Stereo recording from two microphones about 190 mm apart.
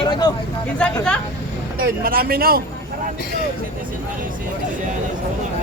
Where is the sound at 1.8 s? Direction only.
50° right (ahead or behind).